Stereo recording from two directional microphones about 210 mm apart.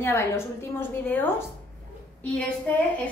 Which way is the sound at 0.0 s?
10° left (ahead or behind).